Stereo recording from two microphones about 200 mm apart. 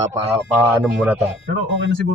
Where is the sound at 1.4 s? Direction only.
60° right (ahead or behind).